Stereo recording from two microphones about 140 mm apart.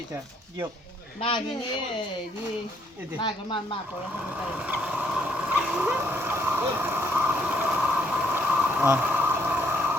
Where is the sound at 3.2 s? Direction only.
35° left (ahead or behind).